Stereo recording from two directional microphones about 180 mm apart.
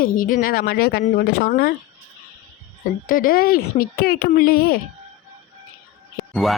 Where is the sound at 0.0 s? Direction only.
50° left (ahead or behind).